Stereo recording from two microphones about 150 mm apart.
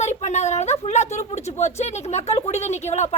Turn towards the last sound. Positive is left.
turn(degrees=50)  # may be behind; listen again after turning